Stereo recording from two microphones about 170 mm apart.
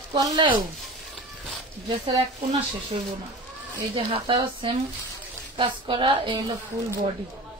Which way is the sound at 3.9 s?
30° right (ahead or behind).